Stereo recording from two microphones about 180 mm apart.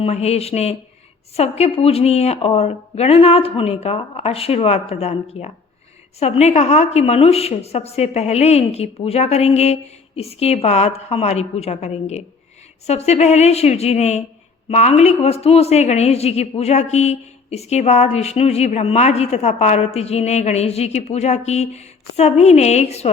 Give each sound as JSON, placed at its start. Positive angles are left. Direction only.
{"t": 0.0, "sound": "a woman's voice", "side_deg": 35}